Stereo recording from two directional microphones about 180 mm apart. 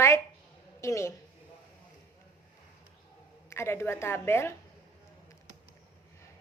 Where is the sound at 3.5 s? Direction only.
15° left (ahead or behind).